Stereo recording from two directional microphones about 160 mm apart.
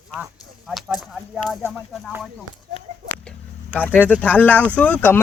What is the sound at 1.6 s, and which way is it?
Speech, 15° right (ahead or behind).